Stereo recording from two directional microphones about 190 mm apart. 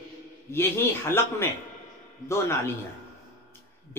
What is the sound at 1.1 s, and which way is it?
A man's voice, 15° left (ahead or behind).